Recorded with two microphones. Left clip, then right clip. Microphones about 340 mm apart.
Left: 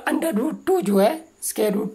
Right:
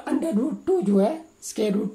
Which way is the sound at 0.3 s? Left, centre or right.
Left.